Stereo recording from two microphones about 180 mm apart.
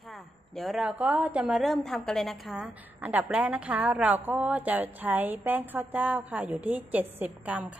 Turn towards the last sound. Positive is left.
turn(degrees=-10)  # may be behind; listen again after turning